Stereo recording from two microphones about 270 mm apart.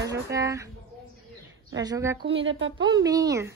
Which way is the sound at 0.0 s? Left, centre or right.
Centre.